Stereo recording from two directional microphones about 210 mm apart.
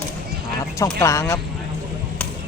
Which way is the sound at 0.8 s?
15° left (ahead or behind).